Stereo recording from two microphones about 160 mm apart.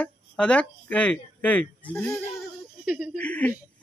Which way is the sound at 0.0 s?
5° left (ahead or behind).